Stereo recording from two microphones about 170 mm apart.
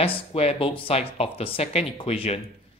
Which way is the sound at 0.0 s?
35° left (ahead or behind).